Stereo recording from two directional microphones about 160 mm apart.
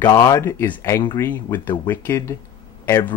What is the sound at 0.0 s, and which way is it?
Speech, 20° left (ahead or behind).